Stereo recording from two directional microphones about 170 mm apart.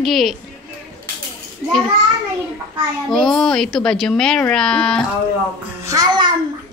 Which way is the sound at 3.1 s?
5° left (ahead or behind).